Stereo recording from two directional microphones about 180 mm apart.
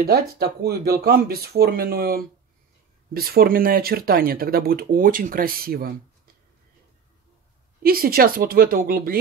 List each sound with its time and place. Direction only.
0.0 s speech: 60° right (ahead or behind)
7.8 s speech: 55° right (ahead or behind)